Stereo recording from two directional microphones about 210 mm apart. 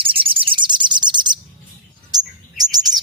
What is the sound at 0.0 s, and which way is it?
Bird, 25° right (ahead or behind).